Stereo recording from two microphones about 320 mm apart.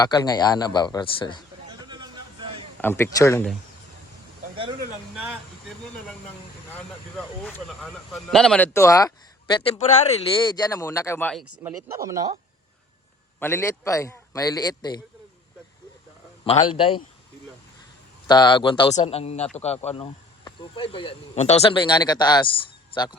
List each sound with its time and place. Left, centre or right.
0.0 s speech: centre
1.6 s vehicle: centre
2.8 s speech: centre
7.4 s speech: centre
11.5 s speech: centre
13.4 s speech: centre
16.5 s speech: centre
18.3 s speech: centre